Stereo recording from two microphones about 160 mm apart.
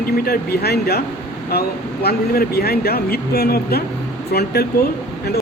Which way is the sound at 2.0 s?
75° left (ahead or behind).